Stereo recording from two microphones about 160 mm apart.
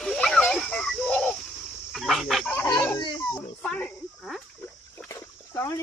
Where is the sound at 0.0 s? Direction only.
5° left (ahead or behind).